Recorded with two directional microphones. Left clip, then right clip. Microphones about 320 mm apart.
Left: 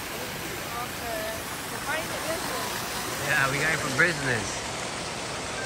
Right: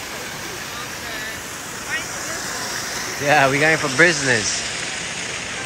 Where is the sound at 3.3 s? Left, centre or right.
Centre.